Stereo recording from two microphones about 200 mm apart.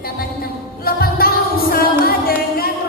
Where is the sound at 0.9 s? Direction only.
50° left (ahead or behind).